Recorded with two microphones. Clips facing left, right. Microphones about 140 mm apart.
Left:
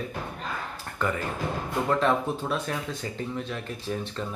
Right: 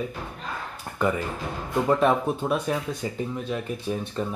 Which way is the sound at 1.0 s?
15° right (ahead or behind).